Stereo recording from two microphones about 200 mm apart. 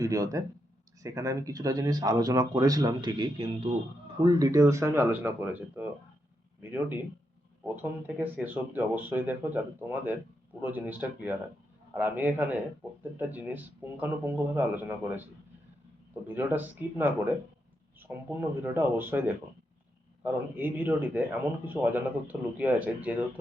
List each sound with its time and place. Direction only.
0.0 s speech: 15° right (ahead or behind)
16.2 s speech: 10° right (ahead or behind)
20.2 s speech: 10° right (ahead or behind)